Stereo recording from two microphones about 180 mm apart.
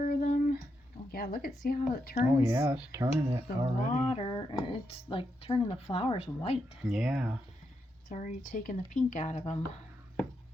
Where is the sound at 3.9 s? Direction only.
40° left (ahead or behind).